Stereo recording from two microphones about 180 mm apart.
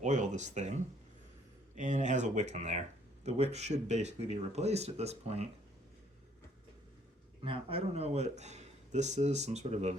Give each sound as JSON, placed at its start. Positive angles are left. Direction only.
{"t": 0.0, "sound": "a sound", "side_deg": -40}
{"t": 1.7, "sound": "speech", "side_deg": -45}
{"t": 7.4, "sound": "speech", "side_deg": -30}